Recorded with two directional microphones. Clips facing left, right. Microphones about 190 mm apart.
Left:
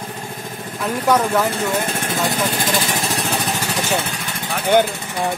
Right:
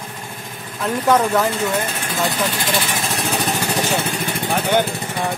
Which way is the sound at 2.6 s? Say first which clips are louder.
Left 1 dB; 45° left (ahead or behind).